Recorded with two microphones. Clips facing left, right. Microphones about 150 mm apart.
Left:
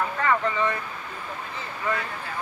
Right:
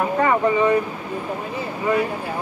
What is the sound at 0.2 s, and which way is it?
Speech, 15° right (ahead or behind).